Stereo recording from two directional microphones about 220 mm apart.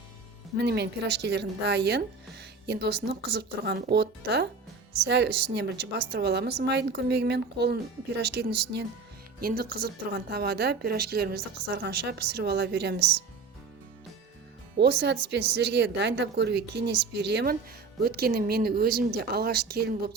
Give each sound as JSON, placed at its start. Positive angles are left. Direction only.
{"t": 0.5, "sound": "a woman's voice", "side_deg": -50}
{"t": 14.8, "sound": "a woman's voice", "side_deg": -50}